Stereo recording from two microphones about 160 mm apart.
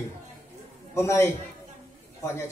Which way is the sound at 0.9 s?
15° left (ahead or behind).